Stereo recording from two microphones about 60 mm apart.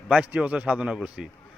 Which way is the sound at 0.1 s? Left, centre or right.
Right.